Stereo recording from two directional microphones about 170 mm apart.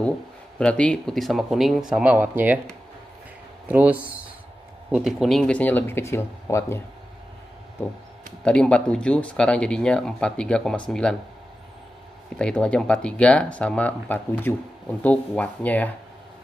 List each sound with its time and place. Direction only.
0.6 s speech: 5° left (ahead or behind); by 2.6 s 10° right (ahead or behind)
3.6 s speech: 10° right (ahead or behind); by 6.8 s 15° left (ahead or behind)
8.5 s speech: 5° left (ahead or behind)
12.4 s speech: 5° left (ahead or behind)